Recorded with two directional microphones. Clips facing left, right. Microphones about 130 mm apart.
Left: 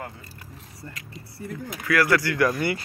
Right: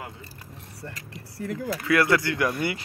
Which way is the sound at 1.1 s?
90° right.